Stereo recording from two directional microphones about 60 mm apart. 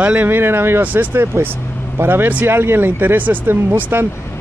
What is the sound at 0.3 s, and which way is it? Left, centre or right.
Speech, right.